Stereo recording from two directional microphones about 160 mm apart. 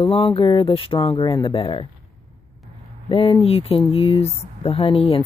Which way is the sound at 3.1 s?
35° left (ahead or behind).